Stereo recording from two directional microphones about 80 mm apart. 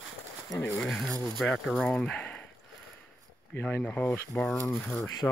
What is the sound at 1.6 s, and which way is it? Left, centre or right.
Speech, centre.